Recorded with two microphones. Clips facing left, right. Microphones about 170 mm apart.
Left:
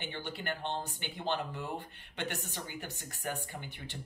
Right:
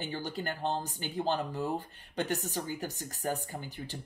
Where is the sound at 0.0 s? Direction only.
40° right (ahead or behind).